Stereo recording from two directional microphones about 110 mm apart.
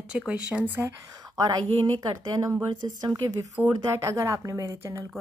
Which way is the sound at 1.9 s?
35° right (ahead or behind).